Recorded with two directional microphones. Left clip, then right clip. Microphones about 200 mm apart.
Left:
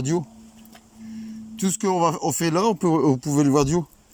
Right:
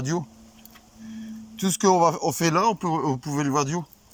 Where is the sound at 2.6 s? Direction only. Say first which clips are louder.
Left 4 dB; 20° left (ahead or behind).